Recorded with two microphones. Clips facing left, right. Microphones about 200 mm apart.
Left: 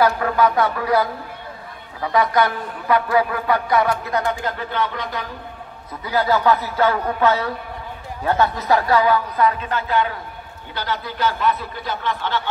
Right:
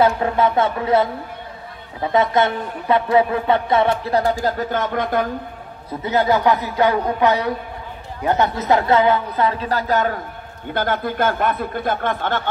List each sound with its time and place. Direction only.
0.0 s a man's voice: 25° right (ahead or behind); by 5.3 s 50° right (ahead or behind)
6.0 s a man's voice: 20° right (ahead or behind); by 12.4 s 50° right (ahead or behind)